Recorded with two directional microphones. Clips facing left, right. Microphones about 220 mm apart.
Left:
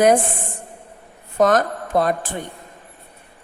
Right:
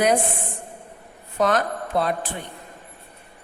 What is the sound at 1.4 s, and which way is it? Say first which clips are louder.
Speech: left 5 dB; 45° left (ahead or behind).